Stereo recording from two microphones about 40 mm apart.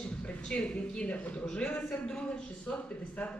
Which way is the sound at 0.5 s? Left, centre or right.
Left.